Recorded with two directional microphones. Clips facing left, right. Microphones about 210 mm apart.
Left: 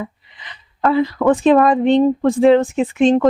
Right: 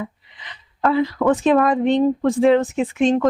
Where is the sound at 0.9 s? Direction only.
30° left (ahead or behind).